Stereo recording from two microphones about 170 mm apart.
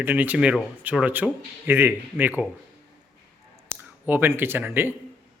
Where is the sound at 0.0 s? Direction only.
10° right (ahead or behind).